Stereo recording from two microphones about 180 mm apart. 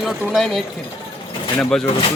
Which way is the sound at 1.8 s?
30° left (ahead or behind).